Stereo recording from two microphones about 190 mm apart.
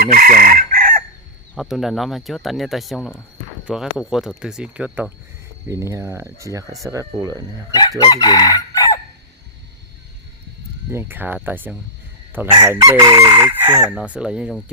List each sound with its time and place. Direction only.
0.1 s chicken: 45° right (ahead or behind)
1.5 s speech: centre (ahead or behind)
5.6 s chicken: 15° right (ahead or behind)
7.7 s chicken: 20° left (ahead or behind)
10.9 s chicken: 10° right (ahead or behind)
14.2 s speech: 5° right (ahead or behind)